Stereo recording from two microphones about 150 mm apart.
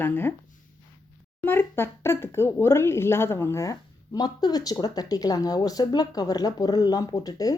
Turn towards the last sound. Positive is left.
turn(degrees=25)  # may be behind; listen again after turning